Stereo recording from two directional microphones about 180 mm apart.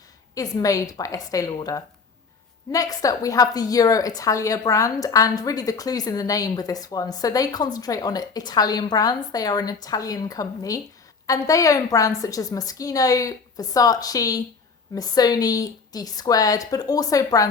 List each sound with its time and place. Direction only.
0.3 s a woman's voice: 20° left (ahead or behind)